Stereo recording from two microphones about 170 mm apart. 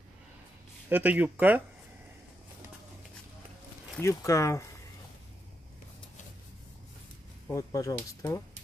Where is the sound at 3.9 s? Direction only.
15° left (ahead or behind).